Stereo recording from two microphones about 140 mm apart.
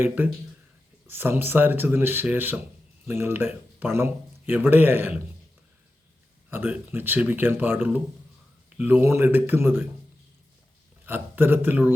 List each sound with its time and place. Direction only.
0.2 s speech: 15° right (ahead or behind)
6.5 s speech: 10° right (ahead or behind)
11.0 s speech: 15° right (ahead or behind)